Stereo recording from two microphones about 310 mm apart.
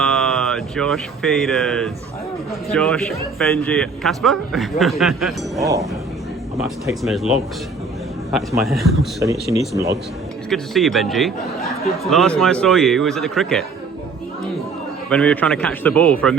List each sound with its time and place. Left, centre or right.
0.0 s speech: centre
10.5 s speech: centre
15.1 s speech: centre